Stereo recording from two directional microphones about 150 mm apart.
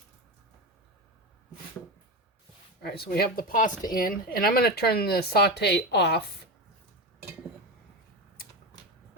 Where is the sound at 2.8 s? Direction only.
90° left.